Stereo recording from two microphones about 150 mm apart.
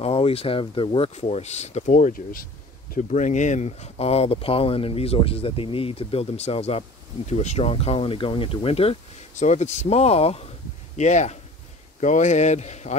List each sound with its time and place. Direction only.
0.0 s speech: 40° left (ahead or behind)
9.3 s speech: 55° left (ahead or behind)